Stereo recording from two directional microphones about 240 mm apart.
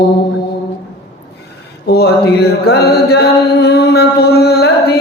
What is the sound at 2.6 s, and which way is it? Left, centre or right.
Mantra, left.